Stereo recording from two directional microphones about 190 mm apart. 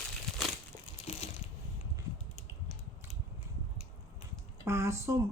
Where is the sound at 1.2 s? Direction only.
35° left (ahead or behind).